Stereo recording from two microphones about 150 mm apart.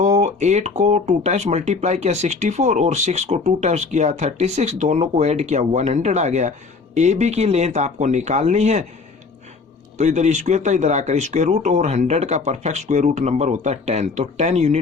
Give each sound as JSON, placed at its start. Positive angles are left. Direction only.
{"t": 0.3, "sound": "speech", "side_deg": -50}
{"t": 10.0, "sound": "speech", "side_deg": -50}